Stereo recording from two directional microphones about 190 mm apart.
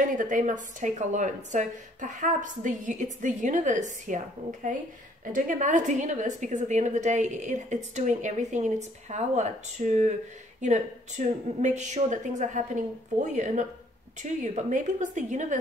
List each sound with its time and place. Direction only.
0.1 s a woman's voice: 40° right (ahead or behind)